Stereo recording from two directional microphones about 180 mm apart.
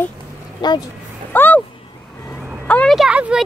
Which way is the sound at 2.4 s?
5° right (ahead or behind).